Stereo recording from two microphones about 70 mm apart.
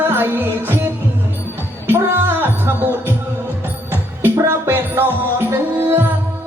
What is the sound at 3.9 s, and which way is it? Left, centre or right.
Music, right.